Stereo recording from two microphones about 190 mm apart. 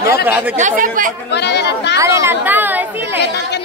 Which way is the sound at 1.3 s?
65° left (ahead or behind).